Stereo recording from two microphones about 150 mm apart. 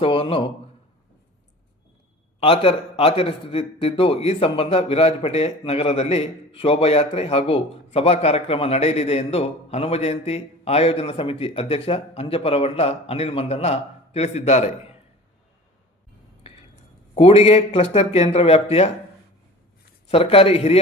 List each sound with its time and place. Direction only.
0.0 s a man's voice: 40° left (ahead or behind)
2.4 s a man's voice: 40° left (ahead or behind)
16.4 s cutlery: 35° left (ahead or behind)
17.2 s a man's voice: 40° left (ahead or behind)
20.1 s a man's voice: 40° left (ahead or behind)